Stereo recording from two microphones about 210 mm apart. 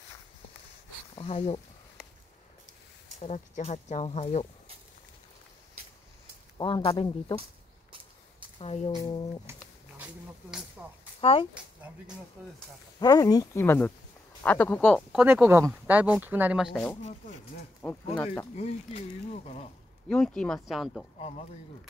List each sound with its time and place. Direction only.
1.1 s speech: 30° left (ahead or behind)
3.2 s speech: 35° left (ahead or behind)
6.6 s speech: 25° left (ahead or behind)
8.5 s speech: 30° left (ahead or behind)
9.5 s a sound: 5° right (ahead or behind)
11.1 s speech: 25° left (ahead or behind)
13.0 s speech: 20° left (ahead or behind)
15.2 s speech: 10° right (ahead or behind)
18.5 s speech: 30° left (ahead or behind)
20.1 s speech: 5° left (ahead or behind)